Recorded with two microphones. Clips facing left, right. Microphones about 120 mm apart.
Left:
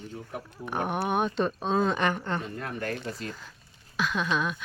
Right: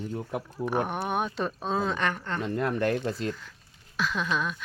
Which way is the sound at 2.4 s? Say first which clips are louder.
Right 7 dB; 75° right (ahead or behind).